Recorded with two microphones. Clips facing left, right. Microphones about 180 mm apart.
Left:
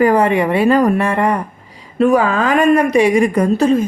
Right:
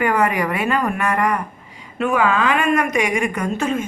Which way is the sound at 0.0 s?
30° left (ahead or behind).